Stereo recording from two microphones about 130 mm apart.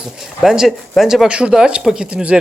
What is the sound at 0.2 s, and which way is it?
Speech, 5° right (ahead or behind).